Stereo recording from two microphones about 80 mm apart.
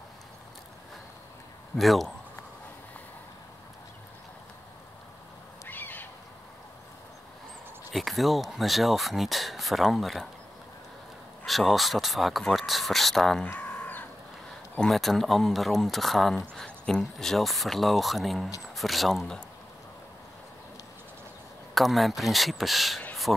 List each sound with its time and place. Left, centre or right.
1.8 s speech: centre
5.7 s owl: left
7.9 s speech: centre
11.4 s speech: centre
13.6 s chicken: left
14.8 s speech: centre
21.7 s speech: centre